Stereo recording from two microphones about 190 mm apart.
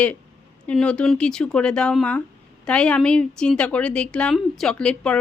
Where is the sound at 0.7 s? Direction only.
5° left (ahead or behind).